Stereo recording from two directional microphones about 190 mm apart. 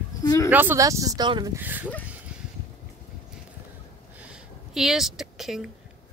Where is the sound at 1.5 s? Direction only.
10° right (ahead or behind).